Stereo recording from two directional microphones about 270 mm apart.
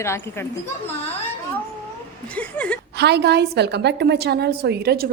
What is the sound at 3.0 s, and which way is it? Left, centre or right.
A woman's voice, right.